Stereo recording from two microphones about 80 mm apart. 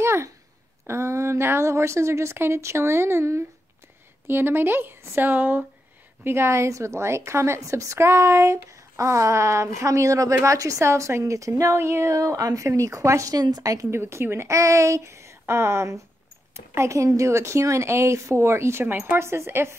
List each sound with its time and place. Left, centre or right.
0.0 s a sound: right
0.8 s a woman's voice: right
13.9 s a woman's voice: right